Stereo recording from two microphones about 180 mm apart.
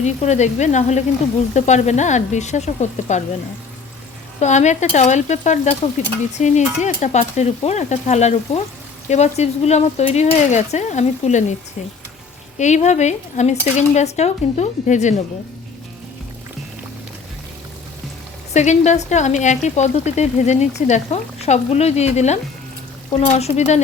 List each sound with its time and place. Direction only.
0.0 s cutlery: 40° left (ahead or behind)
4.4 s cutlery: 40° left (ahead or behind)
12.5 s cutlery: 40° left (ahead or behind)
18.5 s cutlery: 40° left (ahead or behind)